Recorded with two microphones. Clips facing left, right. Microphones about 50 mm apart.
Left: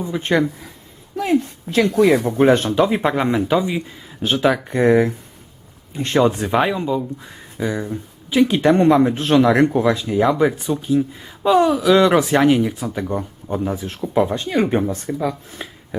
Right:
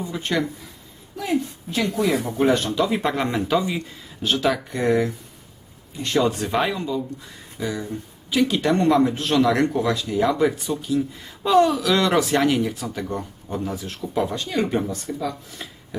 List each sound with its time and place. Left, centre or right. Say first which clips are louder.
0.0 s speech: left 6 dB; left
1.1 s a woman's voice: left 6 dB; left
1.7 s speech: left 7 dB; left
2.2 s speech: left 5 dB; left
3.0 s speech: left 5 dB; centre; by 6.2 s left
6.2 s speech: left 5 dB; left
11.4 s speech: left 3 dB; centre